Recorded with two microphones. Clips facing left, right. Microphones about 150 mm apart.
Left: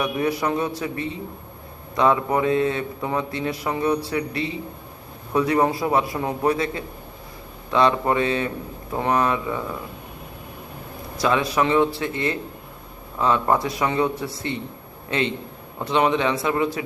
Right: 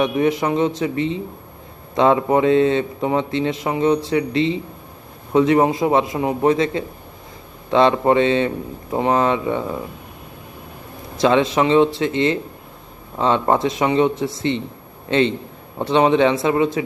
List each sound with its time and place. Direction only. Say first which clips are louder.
0.0 s a man's voice: right 5 dB; 20° right (ahead or behind)
11.2 s a man's voice: right 5 dB; 25° right (ahead or behind)
15.8 s a man's voice: right 5 dB; 25° right (ahead or behind)